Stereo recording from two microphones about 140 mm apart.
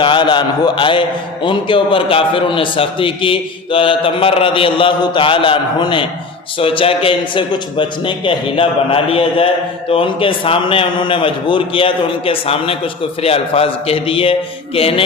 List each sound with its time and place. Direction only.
0.0 s a man's voice: 35° left (ahead or behind)